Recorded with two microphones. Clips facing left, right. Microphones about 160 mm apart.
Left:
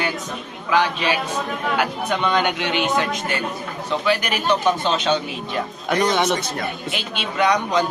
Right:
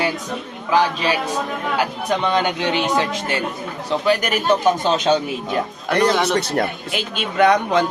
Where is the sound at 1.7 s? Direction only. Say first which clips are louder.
Right 2 dB; 35° right (ahead or behind).